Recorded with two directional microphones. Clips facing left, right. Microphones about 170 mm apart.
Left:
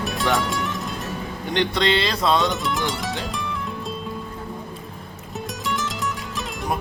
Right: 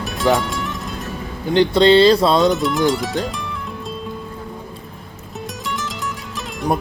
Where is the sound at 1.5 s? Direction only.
30° right (ahead or behind).